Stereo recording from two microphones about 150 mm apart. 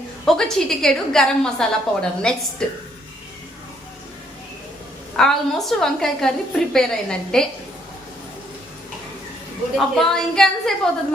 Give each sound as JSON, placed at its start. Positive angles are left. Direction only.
{"t": 0.3, "sound": "a woman's voice", "side_deg": 5}
{"t": 5.1, "sound": "a woman's voice", "side_deg": 5}
{"t": 9.7, "sound": "a woman's voice", "side_deg": 0}